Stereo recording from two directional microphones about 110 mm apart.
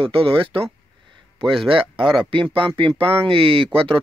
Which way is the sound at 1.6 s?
55° right (ahead or behind).